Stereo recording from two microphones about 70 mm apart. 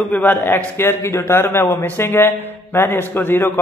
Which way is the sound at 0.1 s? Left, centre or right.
Left.